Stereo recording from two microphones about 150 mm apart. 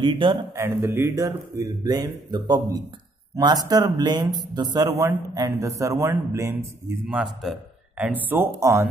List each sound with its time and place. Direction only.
0.0 s speech: 30° right (ahead or behind)
0.6 s speech: 15° right (ahead or behind)